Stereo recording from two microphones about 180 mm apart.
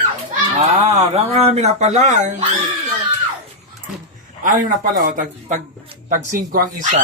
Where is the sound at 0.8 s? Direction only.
35° right (ahead or behind).